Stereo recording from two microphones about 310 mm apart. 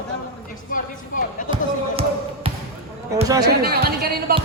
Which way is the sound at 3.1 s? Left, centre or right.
Centre.